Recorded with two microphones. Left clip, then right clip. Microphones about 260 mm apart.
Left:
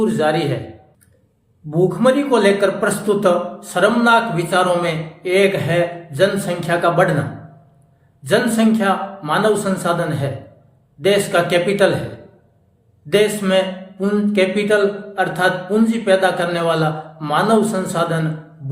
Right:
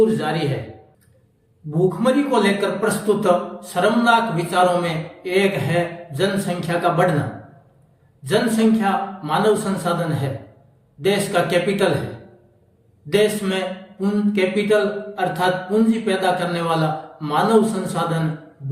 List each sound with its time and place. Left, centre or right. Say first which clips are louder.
0.0 s a man's voice: left 2 dB; centre
2.0 s a man's voice: left 4 dB; centre
8.2 s a man's voice: left 3 dB; centre
13.1 s a man's voice: left 3 dB; centre